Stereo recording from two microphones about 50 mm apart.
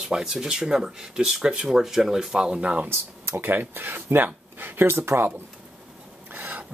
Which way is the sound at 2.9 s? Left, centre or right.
Right.